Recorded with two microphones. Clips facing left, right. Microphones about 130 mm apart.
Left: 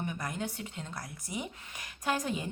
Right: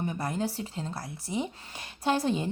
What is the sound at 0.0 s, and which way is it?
A woman's voice, 30° right (ahead or behind).